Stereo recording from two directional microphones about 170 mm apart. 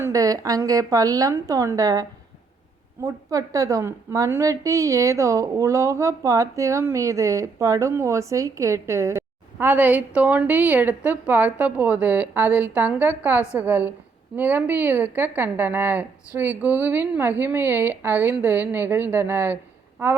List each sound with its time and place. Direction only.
0.0 s a woman's voice: 20° right (ahead or behind)